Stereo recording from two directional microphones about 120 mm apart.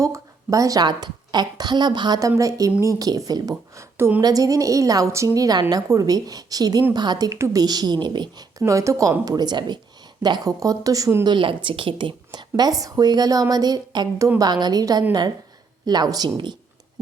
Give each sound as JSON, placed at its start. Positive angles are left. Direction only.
{"t": 0.0, "sound": "speech", "side_deg": -25}